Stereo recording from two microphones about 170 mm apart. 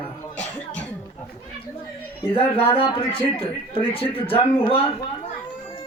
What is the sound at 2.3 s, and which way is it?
A man's voice, 35° left (ahead or behind).